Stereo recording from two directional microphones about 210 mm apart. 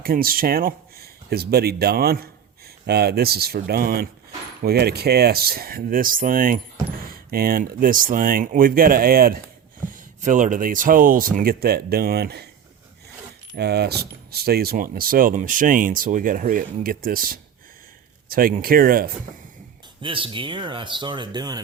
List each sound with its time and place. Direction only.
0.0 s speech: 45° right (ahead or behind)
13.6 s speech: 50° right (ahead or behind)
20.0 s speech: 25° right (ahead or behind)